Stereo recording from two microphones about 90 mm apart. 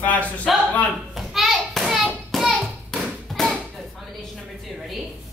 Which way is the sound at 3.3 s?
Centre (ahead or behind).